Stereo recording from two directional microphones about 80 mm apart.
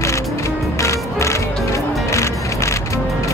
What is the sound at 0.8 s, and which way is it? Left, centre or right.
Music, left.